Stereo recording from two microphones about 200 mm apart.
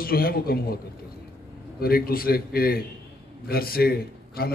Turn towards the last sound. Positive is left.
turn(degrees=50)  # may be behind; listen again after turning